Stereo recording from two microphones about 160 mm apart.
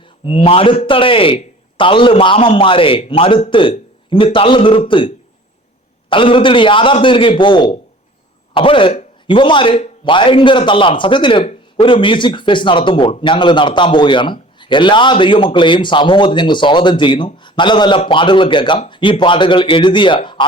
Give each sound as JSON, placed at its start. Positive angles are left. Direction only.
{"t": 0.3, "sound": "speech", "side_deg": 35}